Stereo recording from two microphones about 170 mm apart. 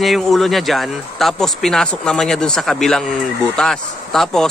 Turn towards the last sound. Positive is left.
turn(degrees=5)  # may be behind; listen again after turning